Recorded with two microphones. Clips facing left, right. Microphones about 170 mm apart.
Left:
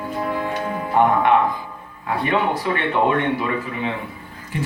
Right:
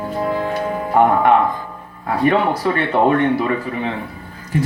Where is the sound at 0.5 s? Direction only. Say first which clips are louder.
Right 3 dB; 40° right (ahead or behind).